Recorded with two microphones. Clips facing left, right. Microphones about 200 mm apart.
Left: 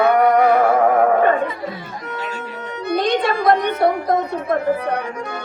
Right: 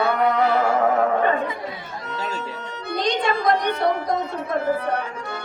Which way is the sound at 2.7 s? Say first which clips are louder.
Left 6 dB; 55° left (ahead or behind).